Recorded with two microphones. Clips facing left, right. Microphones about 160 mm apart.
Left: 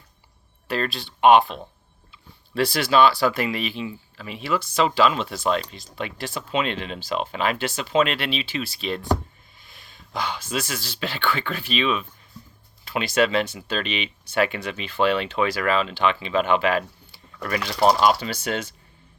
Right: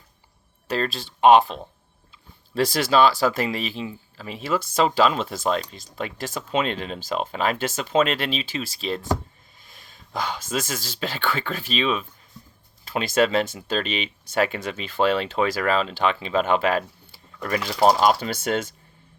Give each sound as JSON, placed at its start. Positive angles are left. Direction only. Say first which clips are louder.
{"t": 0.7, "sound": "speech", "louder": "right 1 dB", "side_deg": -40}
{"t": 17.6, "sound": "speech", "louder": "even", "side_deg": -5}
{"t": 18.0, "sound": "speech", "louder": "even", "side_deg": -45}